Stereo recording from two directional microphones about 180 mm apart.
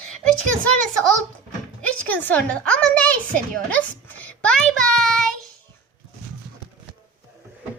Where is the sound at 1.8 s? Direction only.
10° left (ahead or behind).